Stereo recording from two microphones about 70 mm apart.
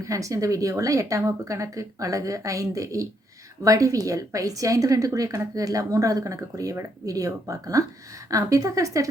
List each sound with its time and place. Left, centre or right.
0.0 s a woman's voice: right